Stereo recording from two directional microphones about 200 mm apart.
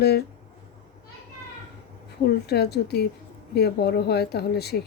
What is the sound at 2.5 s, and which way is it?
Speech, 55° left (ahead or behind).